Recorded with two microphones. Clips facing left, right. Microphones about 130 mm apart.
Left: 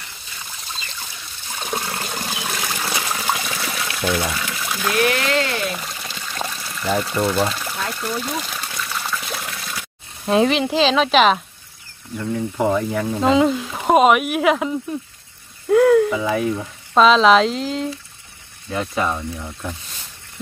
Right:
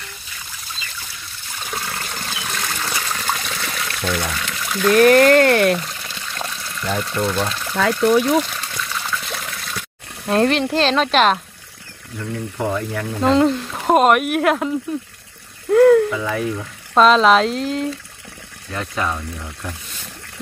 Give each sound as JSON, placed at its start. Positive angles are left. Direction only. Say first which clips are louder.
{"t": 1.7, "sound": "toilet flush", "louder": "left 2 dB", "side_deg": 20}
{"t": 2.1, "sound": "water", "louder": "left 1 dB", "side_deg": 15}
{"t": 4.9, "sound": "speech", "louder": "right 9 dB", "side_deg": -45}
{"t": 5.8, "sound": "pour", "louder": "right 1 dB", "side_deg": 5}
{"t": 8.0, "sound": "speech", "louder": "right 14 dB", "side_deg": -80}
{"t": 8.5, "sound": "water", "louder": "even", "side_deg": 5}
{"t": 12.2, "sound": "speech", "louder": "left 3 dB", "side_deg": 15}
{"t": 16.9, "sound": "speech", "louder": "even", "side_deg": 0}